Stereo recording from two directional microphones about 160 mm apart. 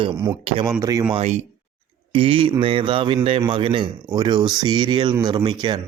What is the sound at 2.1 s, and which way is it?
A man's voice, 35° right (ahead or behind).